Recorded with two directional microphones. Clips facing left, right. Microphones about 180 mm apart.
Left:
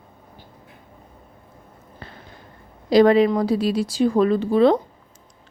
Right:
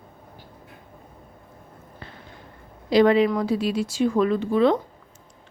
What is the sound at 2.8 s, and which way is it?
A woman's voice, 40° left (ahead or behind).